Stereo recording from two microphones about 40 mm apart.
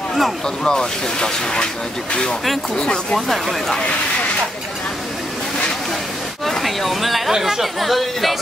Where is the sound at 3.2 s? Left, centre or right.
Centre.